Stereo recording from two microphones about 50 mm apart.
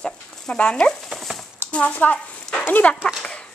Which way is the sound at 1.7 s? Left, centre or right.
Left.